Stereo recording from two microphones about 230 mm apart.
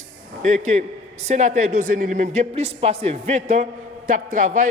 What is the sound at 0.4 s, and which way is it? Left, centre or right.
A man's voice, right.